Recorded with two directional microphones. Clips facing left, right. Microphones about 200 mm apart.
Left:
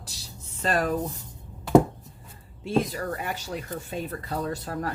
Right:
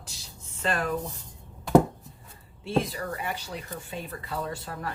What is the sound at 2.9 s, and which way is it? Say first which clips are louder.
A woman's voice: left 2 dB; 45° left (ahead or behind).